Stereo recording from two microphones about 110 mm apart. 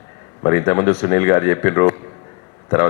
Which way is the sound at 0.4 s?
25° left (ahead or behind).